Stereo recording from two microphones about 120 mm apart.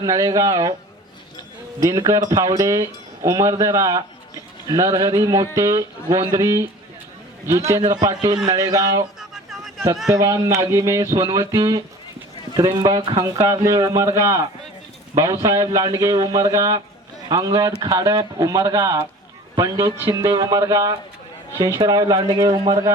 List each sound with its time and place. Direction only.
0.0 s speech: 30° right (ahead or behind)
1.8 s speech: 30° right (ahead or behind)
7.8 s speech: 35° right (ahead or behind)
9.3 s a sound: centre (ahead or behind)
10.1 s speech: 25° right (ahead or behind)
11.3 s speech: 45° right (ahead or behind)
13.1 s speech: 25° right (ahead or behind)